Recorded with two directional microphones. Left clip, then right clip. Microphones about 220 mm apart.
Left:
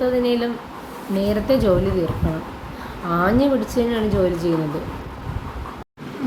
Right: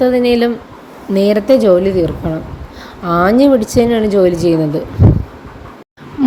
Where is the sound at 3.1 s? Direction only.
35° right (ahead or behind).